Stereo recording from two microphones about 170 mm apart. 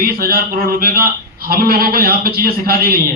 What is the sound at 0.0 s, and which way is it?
A man's voice, 60° right (ahead or behind).